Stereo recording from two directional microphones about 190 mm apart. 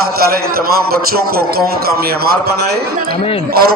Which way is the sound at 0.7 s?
50° right (ahead or behind).